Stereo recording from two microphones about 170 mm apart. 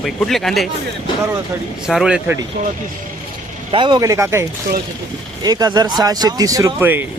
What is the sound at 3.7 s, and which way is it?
Speech, 30° right (ahead or behind).